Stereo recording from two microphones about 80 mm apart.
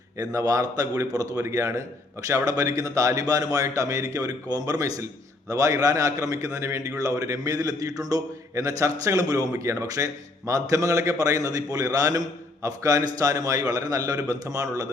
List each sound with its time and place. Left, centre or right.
0.2 s a man's voice: right